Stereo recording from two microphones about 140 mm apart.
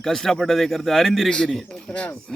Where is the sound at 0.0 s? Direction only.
5° left (ahead or behind).